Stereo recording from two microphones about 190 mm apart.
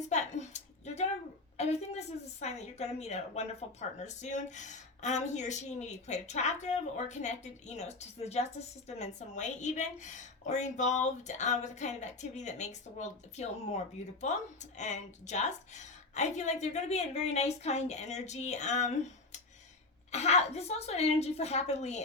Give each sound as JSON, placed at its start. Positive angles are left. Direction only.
{"t": 0.1, "sound": "a sound", "side_deg": 40}
{"t": 1.5, "sound": "a woman's voice", "side_deg": 35}
{"t": 20.1, "sound": "a woman's voice", "side_deg": 35}